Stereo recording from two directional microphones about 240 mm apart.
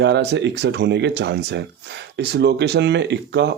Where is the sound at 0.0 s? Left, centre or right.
Right.